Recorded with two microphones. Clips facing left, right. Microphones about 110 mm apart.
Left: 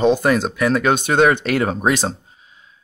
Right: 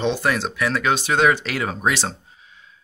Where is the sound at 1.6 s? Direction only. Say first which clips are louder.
Left 4 dB; 40° left (ahead or behind).